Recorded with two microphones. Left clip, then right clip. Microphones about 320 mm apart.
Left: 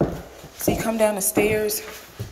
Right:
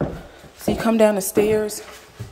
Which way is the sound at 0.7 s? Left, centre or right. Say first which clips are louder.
Right 6 dB; right.